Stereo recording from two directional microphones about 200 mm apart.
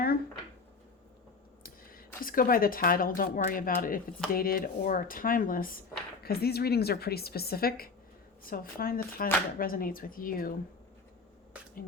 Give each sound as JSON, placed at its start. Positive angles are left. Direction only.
{"t": 1.6, "sound": "speech", "side_deg": 45}